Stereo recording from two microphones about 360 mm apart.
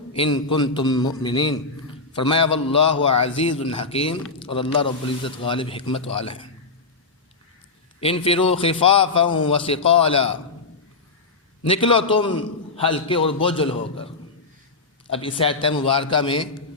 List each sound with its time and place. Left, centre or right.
0.1 s a man's voice: centre
8.0 s a man's voice: centre
11.7 s a man's voice: centre
15.1 s a man's voice: centre